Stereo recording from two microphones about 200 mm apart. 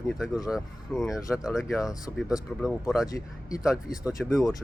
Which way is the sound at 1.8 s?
15° left (ahead or behind).